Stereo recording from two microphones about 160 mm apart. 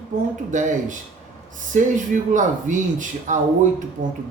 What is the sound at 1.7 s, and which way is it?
Speech, 50° right (ahead or behind).